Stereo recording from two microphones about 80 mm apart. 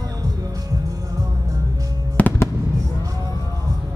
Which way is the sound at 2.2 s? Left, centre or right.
Centre.